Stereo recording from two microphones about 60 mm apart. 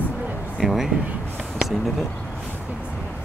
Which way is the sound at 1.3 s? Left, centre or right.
Centre.